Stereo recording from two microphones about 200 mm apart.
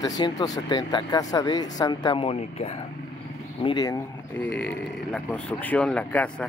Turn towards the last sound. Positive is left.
turn(degrees=5)  # may be behind; listen again after turning